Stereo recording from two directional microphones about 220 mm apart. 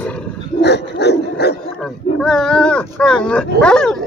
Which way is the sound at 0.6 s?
50° left (ahead or behind).